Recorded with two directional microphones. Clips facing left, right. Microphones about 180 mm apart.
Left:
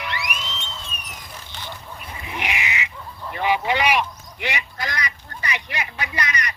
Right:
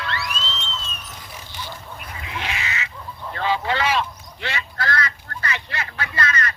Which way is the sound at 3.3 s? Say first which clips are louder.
Left 2 dB; 15° left (ahead or behind).